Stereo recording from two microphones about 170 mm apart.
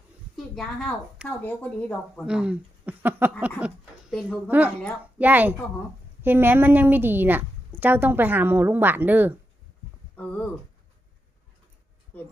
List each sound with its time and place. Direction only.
0.5 s a woman's voice: 5° left (ahead or behind)
2.2 s a woman's voice: 5° right (ahead or behind)
10.2 s a woman's voice: 10° left (ahead or behind)
12.1 s speech: 10° left (ahead or behind)